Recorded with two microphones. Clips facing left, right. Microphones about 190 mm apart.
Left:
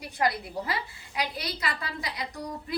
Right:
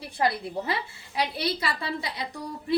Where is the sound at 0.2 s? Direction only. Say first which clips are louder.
Right 2 dB; 25° right (ahead or behind).